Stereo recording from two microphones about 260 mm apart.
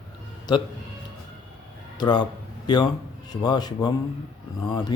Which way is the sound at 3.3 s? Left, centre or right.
Centre.